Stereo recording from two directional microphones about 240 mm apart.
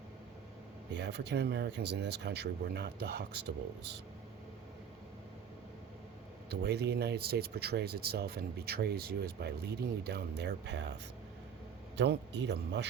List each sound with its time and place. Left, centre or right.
0.9 s speech: right
6.5 s speech: right
11.9 s speech: right